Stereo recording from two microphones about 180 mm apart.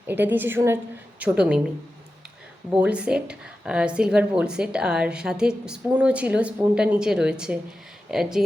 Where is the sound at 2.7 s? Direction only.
5° right (ahead or behind).